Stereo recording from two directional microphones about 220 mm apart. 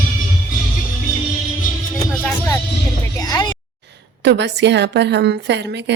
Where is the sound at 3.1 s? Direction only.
15° left (ahead or behind).